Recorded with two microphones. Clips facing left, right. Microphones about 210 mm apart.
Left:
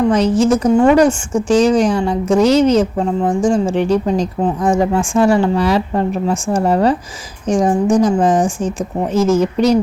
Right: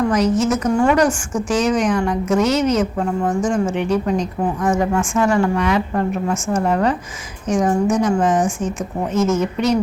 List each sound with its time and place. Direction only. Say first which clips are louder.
0.0 s a woman's voice: left 4 dB; 30° left (ahead or behind)